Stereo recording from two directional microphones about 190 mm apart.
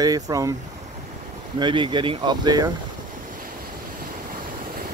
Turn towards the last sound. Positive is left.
turn(degrees=-50)  # may be behind; listen again after turning